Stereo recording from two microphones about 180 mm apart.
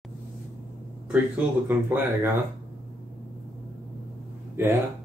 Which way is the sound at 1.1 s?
10° right (ahead or behind).